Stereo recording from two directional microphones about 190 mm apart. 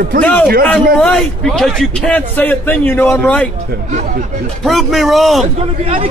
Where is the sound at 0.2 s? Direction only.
5° left (ahead or behind).